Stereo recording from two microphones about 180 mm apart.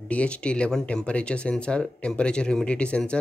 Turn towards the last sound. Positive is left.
turn(degrees=5)  # may be behind; listen again after turning